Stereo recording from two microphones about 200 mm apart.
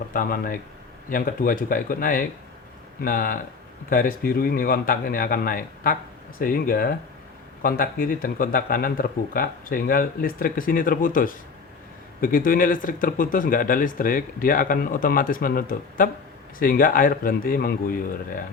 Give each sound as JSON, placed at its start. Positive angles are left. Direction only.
{"t": 0.1, "sound": "speech", "side_deg": 45}